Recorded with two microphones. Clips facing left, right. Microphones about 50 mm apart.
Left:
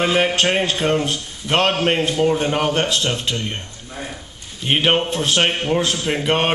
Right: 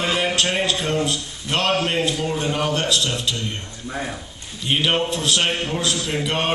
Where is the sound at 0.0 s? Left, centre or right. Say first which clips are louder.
Left 4 dB; left.